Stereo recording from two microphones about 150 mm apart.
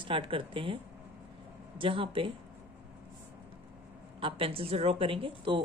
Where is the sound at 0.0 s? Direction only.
35° right (ahead or behind).